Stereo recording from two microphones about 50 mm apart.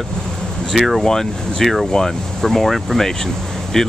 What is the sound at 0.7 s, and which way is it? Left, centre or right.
Speech, centre.